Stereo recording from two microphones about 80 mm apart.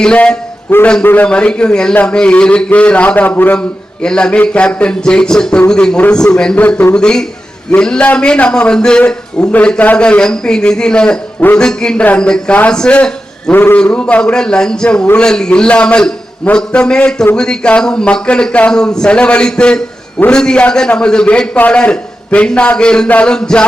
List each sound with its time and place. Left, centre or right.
0.0 s a man's voice: centre
0.7 s a man's voice: left
4.0 s a man's voice: centre
6.7 s a man's voice: left
6.9 s a man's voice: centre